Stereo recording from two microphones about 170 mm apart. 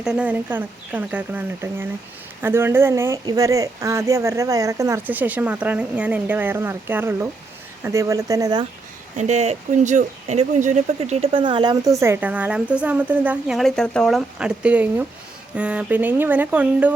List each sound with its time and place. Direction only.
0.0 s speech: 5° right (ahead or behind); by 8.6 s 20° right (ahead or behind)
9.1 s speech: 45° right (ahead or behind); by 16.9 s 10° right (ahead or behind)